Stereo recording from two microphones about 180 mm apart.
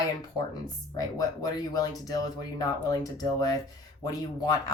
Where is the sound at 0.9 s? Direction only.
20° left (ahead or behind).